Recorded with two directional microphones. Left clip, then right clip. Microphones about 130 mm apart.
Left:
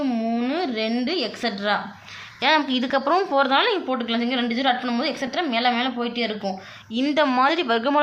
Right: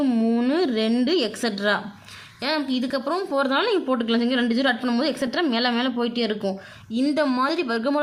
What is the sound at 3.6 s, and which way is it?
A woman's voice, 70° right (ahead or behind).